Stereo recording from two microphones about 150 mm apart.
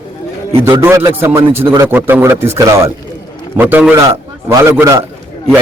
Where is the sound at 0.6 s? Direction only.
20° right (ahead or behind).